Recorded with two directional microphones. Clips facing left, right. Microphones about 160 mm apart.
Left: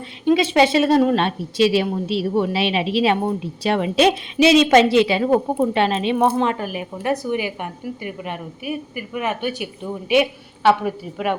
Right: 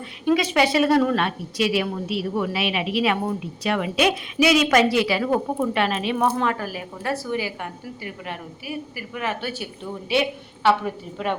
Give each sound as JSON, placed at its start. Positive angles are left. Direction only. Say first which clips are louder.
{"t": 0.3, "sound": "a woman's voice", "louder": "left 4 dB", "side_deg": 25}